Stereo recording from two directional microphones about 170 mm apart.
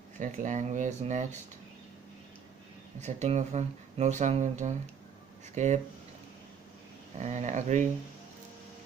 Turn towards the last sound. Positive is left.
turn(degrees=-45)  # may be behind; listen again after turning